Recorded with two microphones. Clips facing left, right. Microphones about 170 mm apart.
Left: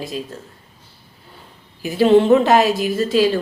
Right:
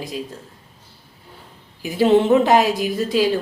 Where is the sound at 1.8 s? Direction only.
15° right (ahead or behind).